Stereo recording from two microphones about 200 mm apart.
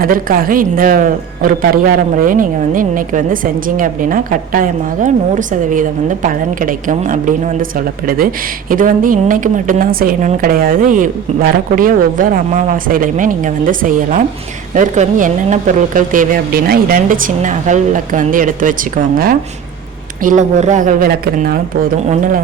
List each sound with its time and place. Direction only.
0.0 s a man's voice: 45° right (ahead or behind)
20.2 s speech: 35° right (ahead or behind)